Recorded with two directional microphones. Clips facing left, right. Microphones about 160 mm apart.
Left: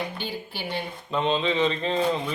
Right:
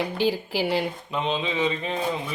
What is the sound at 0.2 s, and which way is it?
Speech, 90° right.